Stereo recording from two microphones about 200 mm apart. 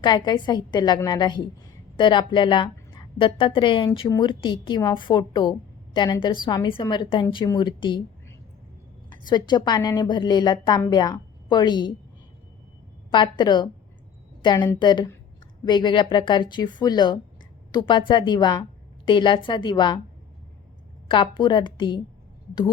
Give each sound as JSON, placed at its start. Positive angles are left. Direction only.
{"t": 0.0, "sound": "a woman's voice", "side_deg": 20}
{"t": 13.1, "sound": "a woman's voice", "side_deg": 25}
{"t": 21.1, "sound": "a woman's voice", "side_deg": 25}